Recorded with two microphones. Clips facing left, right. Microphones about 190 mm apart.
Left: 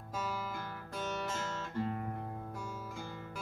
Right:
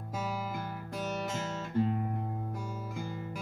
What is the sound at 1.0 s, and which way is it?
Music, 15° right (ahead or behind).